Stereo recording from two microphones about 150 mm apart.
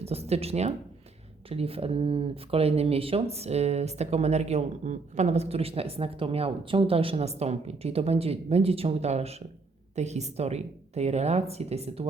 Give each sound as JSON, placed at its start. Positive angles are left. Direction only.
{"t": 0.0, "sound": "speech", "side_deg": -45}